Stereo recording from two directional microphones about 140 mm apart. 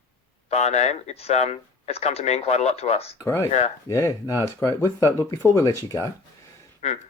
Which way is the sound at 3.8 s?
20° left (ahead or behind).